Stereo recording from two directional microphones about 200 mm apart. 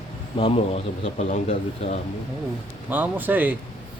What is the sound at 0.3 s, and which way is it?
A man's voice, 30° left (ahead or behind).